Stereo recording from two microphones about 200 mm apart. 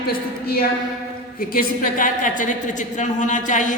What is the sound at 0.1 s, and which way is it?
A woman's voice, 50° left (ahead or behind).